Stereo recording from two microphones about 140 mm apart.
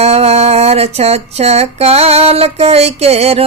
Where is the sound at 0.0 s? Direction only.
50° right (ahead or behind).